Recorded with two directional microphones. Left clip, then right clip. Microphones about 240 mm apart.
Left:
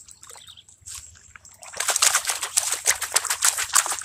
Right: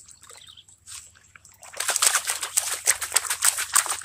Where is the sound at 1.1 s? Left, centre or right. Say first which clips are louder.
Left 4 dB; centre.